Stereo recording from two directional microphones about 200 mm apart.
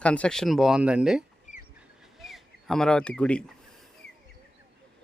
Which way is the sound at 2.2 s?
Centre (ahead or behind).